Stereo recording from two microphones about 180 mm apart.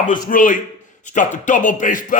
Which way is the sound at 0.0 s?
45° left (ahead or behind).